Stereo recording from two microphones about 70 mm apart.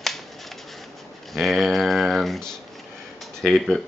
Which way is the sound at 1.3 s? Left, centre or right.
Centre.